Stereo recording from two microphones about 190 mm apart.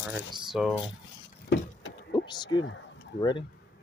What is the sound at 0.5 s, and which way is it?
Speech, centre (ahead or behind).